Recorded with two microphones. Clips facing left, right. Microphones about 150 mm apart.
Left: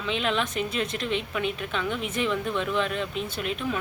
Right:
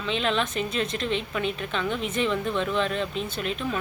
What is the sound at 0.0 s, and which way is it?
Speech, 10° left (ahead or behind).